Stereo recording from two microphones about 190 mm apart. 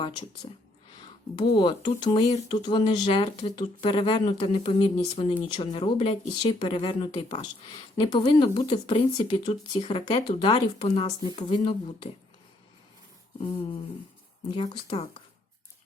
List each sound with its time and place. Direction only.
0.4 s speech: 25° left (ahead or behind)
14.5 s speech: 25° left (ahead or behind)